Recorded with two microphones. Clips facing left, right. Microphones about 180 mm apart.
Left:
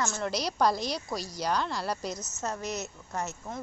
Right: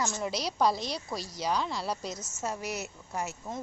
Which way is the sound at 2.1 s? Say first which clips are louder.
Left 2 dB; 30° right (ahead or behind).